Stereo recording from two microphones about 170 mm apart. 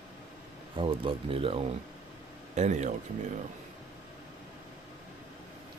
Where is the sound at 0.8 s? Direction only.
35° right (ahead or behind).